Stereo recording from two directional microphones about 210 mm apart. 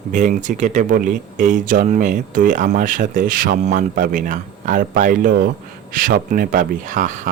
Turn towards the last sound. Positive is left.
turn(degrees=-35)  # may be behind; listen again after turning